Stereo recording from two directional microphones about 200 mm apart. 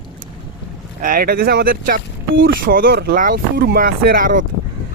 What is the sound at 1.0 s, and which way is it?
Speech, 45° right (ahead or behind).